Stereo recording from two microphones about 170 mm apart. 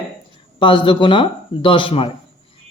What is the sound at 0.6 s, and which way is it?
Speech, 30° left (ahead or behind).